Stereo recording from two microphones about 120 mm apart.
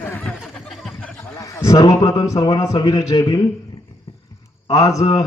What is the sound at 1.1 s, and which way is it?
A man's voice, 25° left (ahead or behind).